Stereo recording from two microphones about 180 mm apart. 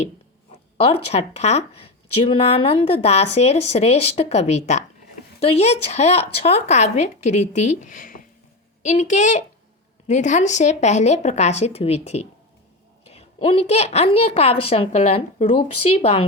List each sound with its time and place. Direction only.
0.8 s speech: 35° left (ahead or behind)